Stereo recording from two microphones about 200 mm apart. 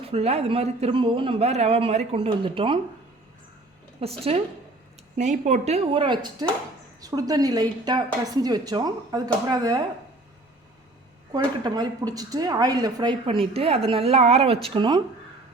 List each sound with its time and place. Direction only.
0.0 s speech: 30° right (ahead or behind)
4.0 s a woman's voice: 30° right (ahead or behind)
11.3 s speech: 20° right (ahead or behind)